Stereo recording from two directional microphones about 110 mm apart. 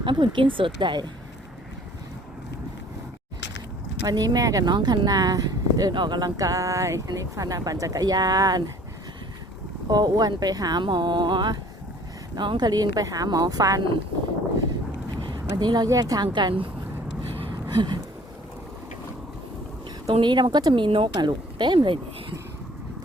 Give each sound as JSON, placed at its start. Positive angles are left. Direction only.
{"t": 0.0, "sound": "speech", "side_deg": -50}
{"t": 4.0, "sound": "speech", "side_deg": -35}
{"t": 9.9, "sound": "speech", "side_deg": -40}
{"t": 15.2, "sound": "speech", "side_deg": -40}
{"t": 17.7, "sound": "a sound", "side_deg": -40}
{"t": 20.2, "sound": "speech", "side_deg": -45}